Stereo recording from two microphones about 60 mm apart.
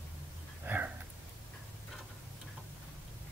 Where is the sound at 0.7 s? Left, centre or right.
Right.